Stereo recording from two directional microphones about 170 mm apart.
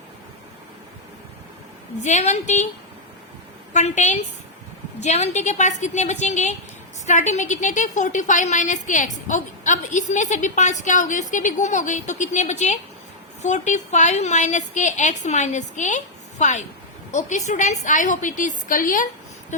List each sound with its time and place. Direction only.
2.0 s a woman's voice: 45° left (ahead or behind)
3.7 s a woman's voice: 45° left (ahead or behind)